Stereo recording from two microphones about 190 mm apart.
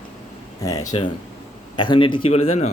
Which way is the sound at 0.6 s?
20° left (ahead or behind).